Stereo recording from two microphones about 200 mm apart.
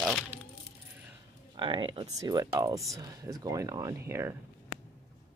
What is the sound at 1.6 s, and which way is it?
Speech, 25° right (ahead or behind).